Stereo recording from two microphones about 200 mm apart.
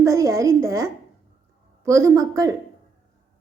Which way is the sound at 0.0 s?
15° right (ahead or behind).